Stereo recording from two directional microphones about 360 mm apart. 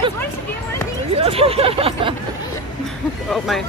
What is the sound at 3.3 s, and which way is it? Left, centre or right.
Speech, centre.